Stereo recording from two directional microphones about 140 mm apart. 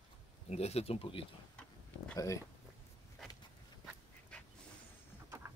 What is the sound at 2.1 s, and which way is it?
Speech, 20° left (ahead or behind).